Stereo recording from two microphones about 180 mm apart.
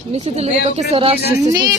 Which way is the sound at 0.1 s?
35° right (ahead or behind).